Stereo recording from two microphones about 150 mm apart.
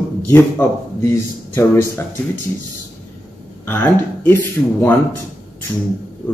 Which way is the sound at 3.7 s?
15° left (ahead or behind).